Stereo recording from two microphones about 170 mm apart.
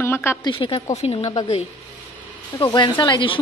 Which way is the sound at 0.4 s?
30° left (ahead or behind).